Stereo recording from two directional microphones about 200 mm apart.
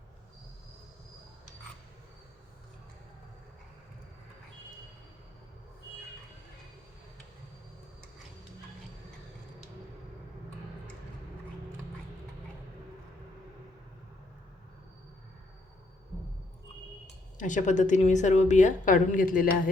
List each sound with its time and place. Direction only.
17.3 s a woman's voice: 40° left (ahead or behind)